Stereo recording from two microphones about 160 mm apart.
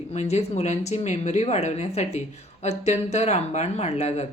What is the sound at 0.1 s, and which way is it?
Speech, 45° left (ahead or behind).